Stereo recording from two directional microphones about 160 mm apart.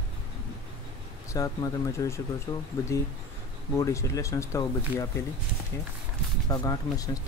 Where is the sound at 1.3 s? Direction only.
20° left (ahead or behind).